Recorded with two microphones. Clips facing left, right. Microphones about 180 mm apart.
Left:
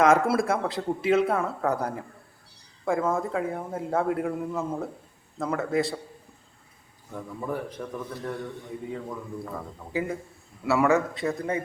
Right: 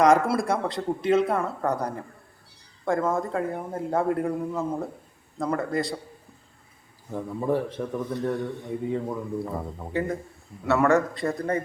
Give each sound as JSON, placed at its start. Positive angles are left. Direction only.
{"t": 0.0, "sound": "speech", "side_deg": 5}
{"t": 7.1, "sound": "a man's voice", "side_deg": -30}
{"t": 9.9, "sound": "speech", "side_deg": 5}